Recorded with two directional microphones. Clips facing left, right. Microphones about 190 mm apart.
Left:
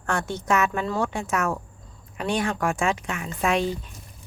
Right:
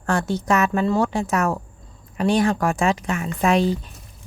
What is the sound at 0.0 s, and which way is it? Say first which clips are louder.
Speech: right 5 dB; 35° right (ahead or behind).